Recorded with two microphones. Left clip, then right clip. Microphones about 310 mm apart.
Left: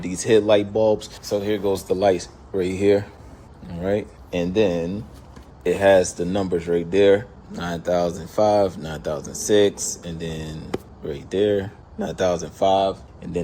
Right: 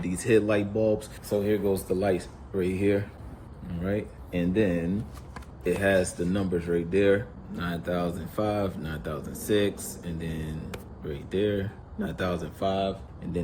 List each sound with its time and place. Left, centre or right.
0.0 s speech: centre